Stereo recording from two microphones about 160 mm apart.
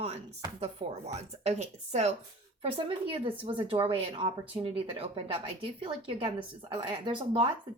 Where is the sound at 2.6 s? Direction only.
35° right (ahead or behind).